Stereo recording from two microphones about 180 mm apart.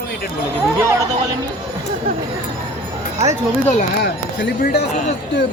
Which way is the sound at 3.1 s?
40° right (ahead or behind).